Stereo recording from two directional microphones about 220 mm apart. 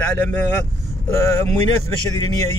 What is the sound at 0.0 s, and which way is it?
Speech, 5° left (ahead or behind).